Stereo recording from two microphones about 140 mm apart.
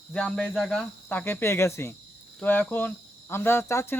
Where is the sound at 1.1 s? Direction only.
15° left (ahead or behind).